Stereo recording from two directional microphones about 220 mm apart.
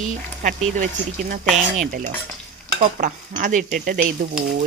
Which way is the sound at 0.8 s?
35° right (ahead or behind).